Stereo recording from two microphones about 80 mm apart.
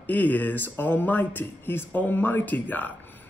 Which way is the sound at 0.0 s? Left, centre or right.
Left.